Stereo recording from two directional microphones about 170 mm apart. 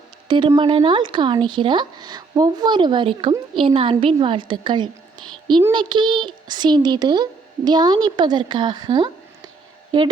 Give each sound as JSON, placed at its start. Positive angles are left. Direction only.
{"t": 0.3, "sound": "a child's voice", "side_deg": -30}